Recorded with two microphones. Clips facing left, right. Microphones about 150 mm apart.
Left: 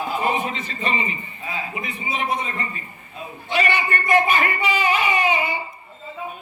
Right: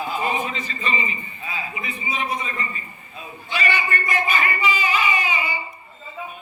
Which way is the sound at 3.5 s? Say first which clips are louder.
Left 3 dB; 60° left (ahead or behind).